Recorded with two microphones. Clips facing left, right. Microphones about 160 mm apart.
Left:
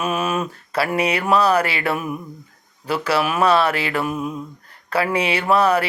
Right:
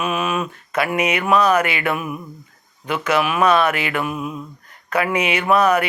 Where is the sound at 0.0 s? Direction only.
40° left (ahead or behind).